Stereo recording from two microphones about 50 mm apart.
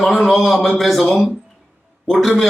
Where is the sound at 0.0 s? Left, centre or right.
Centre.